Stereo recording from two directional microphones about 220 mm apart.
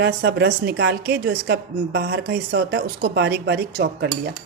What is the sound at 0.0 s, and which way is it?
A woman's voice, 50° right (ahead or behind).